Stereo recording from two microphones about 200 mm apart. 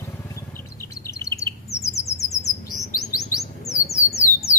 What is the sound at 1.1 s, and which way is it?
Bird, 15° left (ahead or behind).